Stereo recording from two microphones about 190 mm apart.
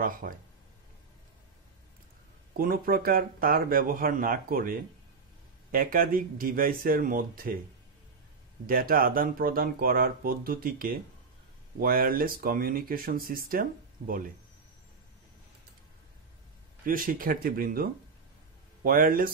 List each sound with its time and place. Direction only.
0.0 s speech: 50° right (ahead or behind)
2.5 s speech: 50° right (ahead or behind)
8.6 s speech: 50° right (ahead or behind)
16.8 s speech: 45° right (ahead or behind)
18.9 s speech: 45° right (ahead or behind)